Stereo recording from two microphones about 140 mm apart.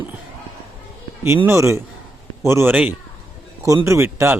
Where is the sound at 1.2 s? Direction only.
15° right (ahead or behind).